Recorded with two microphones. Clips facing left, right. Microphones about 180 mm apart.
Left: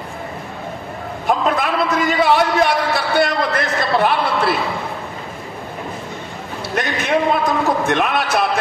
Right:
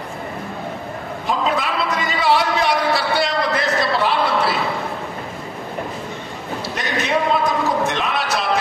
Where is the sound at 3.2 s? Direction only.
55° left (ahead or behind).